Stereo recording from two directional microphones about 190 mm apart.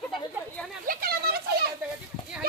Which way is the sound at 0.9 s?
50° right (ahead or behind).